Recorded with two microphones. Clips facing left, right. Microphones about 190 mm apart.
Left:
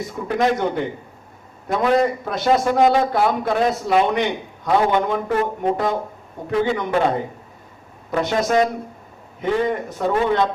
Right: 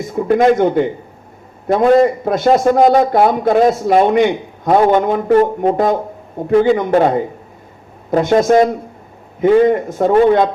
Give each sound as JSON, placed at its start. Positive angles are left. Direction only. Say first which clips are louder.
{"t": 0.1, "sound": "a man's voice", "louder": "right 9 dB", "side_deg": -50}
{"t": 8.1, "sound": "a man's voice", "louder": "right 8 dB", "side_deg": -50}